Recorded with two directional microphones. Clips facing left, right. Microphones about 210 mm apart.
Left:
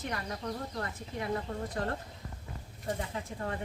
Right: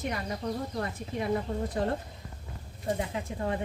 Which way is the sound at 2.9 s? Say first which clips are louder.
Right 4 dB; 20° right (ahead or behind).